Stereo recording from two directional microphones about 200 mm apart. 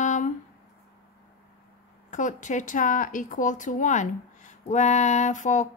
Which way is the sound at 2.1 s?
40° left (ahead or behind).